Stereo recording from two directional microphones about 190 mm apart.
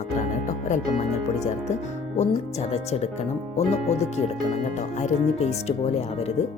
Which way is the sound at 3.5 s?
35° left (ahead or behind).